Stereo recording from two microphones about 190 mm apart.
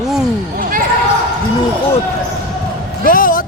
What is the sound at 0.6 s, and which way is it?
Basketball bounce, 45° right (ahead or behind).